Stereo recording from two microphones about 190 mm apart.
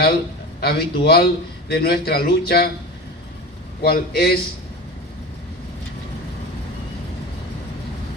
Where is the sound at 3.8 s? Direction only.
55° left (ahead or behind).